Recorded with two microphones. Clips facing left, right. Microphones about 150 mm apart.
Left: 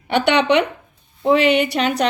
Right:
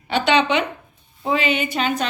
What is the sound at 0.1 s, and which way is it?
A woman's voice, 65° left (ahead or behind).